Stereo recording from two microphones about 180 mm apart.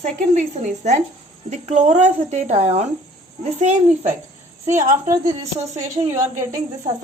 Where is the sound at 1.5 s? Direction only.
40° right (ahead or behind).